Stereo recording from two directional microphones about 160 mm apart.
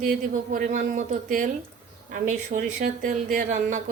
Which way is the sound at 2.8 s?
55° right (ahead or behind).